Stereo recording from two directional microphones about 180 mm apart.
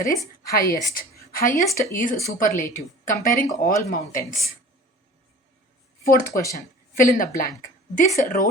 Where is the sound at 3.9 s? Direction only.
45° left (ahead or behind).